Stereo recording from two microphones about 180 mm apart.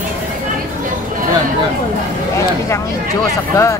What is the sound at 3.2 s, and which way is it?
Speech, 15° left (ahead or behind).